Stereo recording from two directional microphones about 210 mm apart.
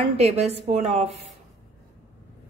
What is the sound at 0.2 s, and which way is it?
Speech, 30° right (ahead or behind).